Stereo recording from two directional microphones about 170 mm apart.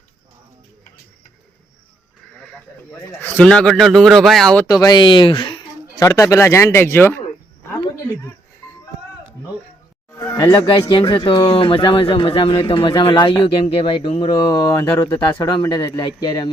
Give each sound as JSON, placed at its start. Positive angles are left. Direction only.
{"t": 2.3, "sound": "sheep", "side_deg": 5}
{"t": 3.2, "sound": "a man's voice", "side_deg": 10}
{"t": 4.6, "sound": "speech", "side_deg": 20}
{"t": 6.0, "sound": "speech", "side_deg": 15}
{"t": 10.1, "sound": "speech", "side_deg": 15}